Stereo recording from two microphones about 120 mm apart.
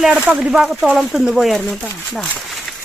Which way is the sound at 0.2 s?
10° right (ahead or behind).